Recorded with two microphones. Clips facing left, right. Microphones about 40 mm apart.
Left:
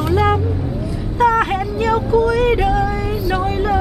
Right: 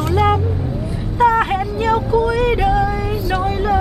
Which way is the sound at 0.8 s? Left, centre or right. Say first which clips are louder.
Left 1 dB; right.